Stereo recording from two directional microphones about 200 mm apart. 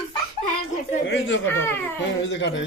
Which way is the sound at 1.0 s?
65° left (ahead or behind).